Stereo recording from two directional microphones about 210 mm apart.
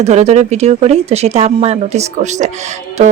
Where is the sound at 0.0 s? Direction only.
30° right (ahead or behind).